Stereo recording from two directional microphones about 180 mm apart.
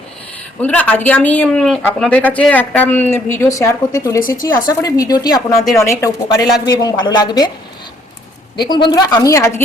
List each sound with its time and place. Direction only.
0.6 s speech: 10° left (ahead or behind)
8.6 s speech: 25° left (ahead or behind)